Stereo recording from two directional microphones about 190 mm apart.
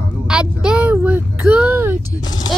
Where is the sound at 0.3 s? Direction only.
5° right (ahead or behind).